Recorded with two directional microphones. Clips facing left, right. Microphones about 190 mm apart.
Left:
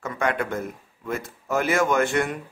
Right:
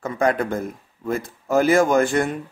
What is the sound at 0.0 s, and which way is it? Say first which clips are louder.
Speech: right 5 dB; 35° right (ahead or behind).